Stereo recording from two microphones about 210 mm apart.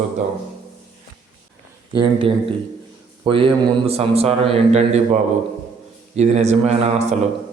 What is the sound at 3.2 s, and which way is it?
A man's voice, 25° right (ahead or behind).